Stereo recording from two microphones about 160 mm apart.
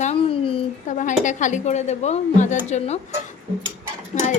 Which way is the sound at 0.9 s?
50° left (ahead or behind).